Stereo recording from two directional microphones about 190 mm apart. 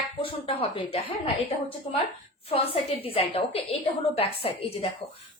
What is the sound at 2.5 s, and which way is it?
A woman's voice, 30° left (ahead or behind).